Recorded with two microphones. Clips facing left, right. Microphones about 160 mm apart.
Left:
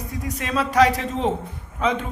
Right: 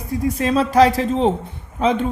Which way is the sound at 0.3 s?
30° right (ahead or behind).